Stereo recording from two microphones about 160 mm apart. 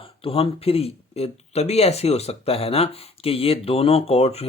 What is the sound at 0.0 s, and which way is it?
Speech, 35° left (ahead or behind).